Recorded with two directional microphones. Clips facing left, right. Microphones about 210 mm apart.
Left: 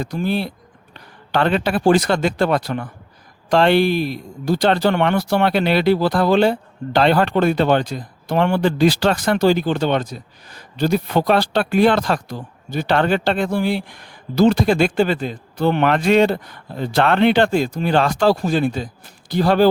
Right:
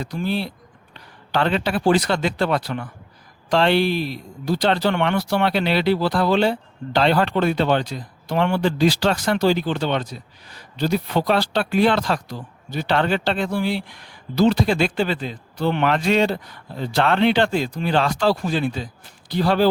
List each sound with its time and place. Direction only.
0.0 s speech: 50° left (ahead or behind)